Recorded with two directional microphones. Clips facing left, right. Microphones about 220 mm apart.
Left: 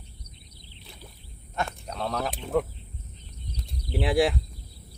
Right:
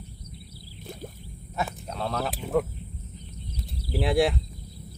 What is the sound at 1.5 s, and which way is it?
Speech, 5° right (ahead or behind).